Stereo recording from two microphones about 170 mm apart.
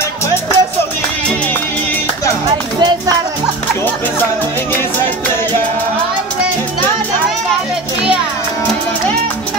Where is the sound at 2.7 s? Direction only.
25° right (ahead or behind).